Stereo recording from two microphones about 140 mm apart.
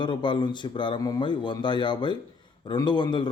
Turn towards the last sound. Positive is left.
turn(degrees=35)  # may be behind; listen again after turning